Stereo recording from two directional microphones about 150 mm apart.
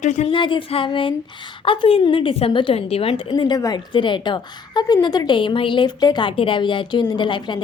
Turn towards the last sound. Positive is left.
turn(degrees=30)  # may be behind; listen again after turning